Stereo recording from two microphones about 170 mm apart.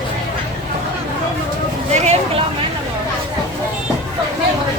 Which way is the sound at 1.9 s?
40° right (ahead or behind).